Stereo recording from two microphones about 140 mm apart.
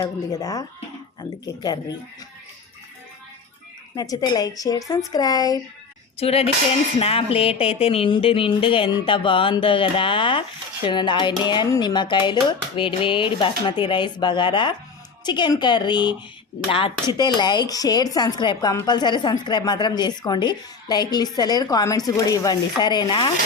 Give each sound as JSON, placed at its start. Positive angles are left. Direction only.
{"t": 0.0, "sound": "a woman's voice", "side_deg": 25}
{"t": 3.9, "sound": "a woman's voice", "side_deg": 25}
{"t": 6.1, "sound": "a sound", "side_deg": 45}
{"t": 7.0, "sound": "a woman's voice", "side_deg": 45}